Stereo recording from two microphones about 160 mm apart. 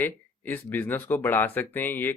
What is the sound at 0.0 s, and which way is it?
Speech, 10° left (ahead or behind).